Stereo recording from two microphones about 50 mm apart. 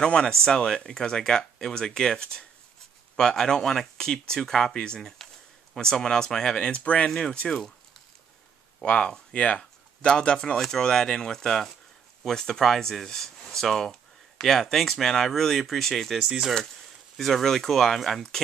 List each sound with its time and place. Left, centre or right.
0.0 s speech: centre
7.1 s speech: centre
8.8 s speech: centre
16.2 s speech: centre
17.2 s speech: centre